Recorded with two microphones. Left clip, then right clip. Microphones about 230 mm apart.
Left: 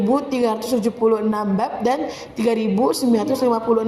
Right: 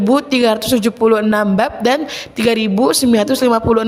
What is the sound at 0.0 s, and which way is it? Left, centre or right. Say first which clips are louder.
A woman's voice: right 6 dB; right.